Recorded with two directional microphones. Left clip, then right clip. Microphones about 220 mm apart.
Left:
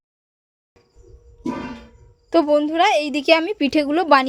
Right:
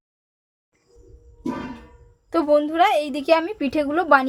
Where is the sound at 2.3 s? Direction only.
20° left (ahead or behind).